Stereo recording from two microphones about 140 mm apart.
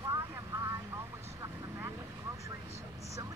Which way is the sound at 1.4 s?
25° right (ahead or behind).